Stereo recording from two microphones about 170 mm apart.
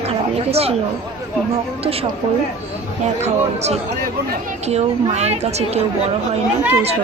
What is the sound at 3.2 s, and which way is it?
Speech, 40° right (ahead or behind).